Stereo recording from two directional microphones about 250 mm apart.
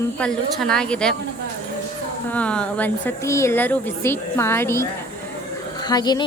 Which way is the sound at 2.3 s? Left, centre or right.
Centre.